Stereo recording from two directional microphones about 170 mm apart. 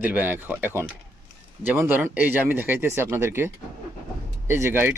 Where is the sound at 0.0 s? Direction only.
10° right (ahead or behind).